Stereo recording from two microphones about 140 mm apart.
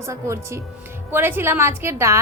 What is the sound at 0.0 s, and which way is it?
A woman's voice, 20° right (ahead or behind).